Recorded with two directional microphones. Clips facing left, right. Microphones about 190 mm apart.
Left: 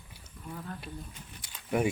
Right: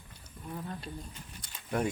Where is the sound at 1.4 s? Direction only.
5° left (ahead or behind).